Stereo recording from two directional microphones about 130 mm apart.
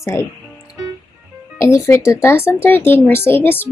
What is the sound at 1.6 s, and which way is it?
Speech, 25° left (ahead or behind).